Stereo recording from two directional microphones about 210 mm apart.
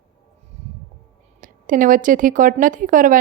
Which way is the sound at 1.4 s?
40° right (ahead or behind).